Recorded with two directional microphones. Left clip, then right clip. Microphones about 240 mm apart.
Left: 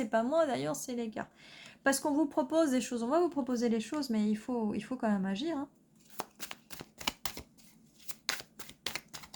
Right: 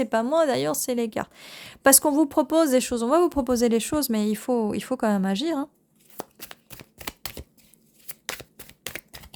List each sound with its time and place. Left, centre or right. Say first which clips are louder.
0.0 s a woman's voice: right 8 dB; right
6.3 s shuffling cards: right 2 dB; centre
8.0 s shuffling cards: right 2 dB; centre